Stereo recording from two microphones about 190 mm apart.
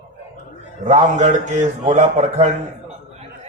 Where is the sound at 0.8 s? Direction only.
40° right (ahead or behind).